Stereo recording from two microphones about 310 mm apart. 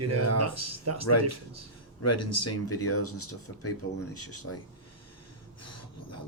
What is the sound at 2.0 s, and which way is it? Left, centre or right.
Speech, left.